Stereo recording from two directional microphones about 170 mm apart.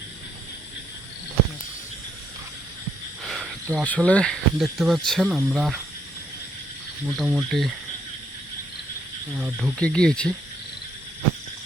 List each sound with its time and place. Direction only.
3.2 s speech: centre (ahead or behind)
7.1 s speech: centre (ahead or behind)
9.3 s speech: centre (ahead or behind)